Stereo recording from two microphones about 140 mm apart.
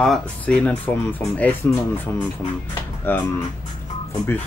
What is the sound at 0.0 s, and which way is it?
Speech, 5° left (ahead or behind).